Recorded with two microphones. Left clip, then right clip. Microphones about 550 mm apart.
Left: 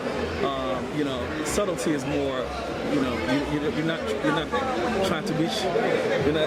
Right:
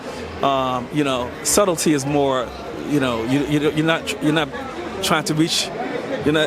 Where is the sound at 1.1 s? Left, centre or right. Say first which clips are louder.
Right 6 dB; right.